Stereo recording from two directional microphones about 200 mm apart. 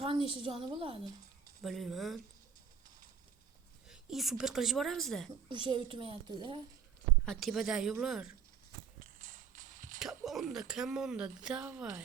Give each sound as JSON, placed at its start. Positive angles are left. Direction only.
{"t": 0.0, "sound": "a woman's voice", "side_deg": -25}
{"t": 1.6, "sound": "speech", "side_deg": 0}
{"t": 3.8, "sound": "speech", "side_deg": 0}
{"t": 5.5, "sound": "a woman's voice", "side_deg": -25}
{"t": 7.3, "sound": "speech", "side_deg": 0}
{"t": 9.2, "sound": "walk", "side_deg": -40}
{"t": 10.0, "sound": "speech", "side_deg": 0}